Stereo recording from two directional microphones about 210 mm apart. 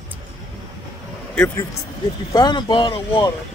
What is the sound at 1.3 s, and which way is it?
Speech, 5° left (ahead or behind).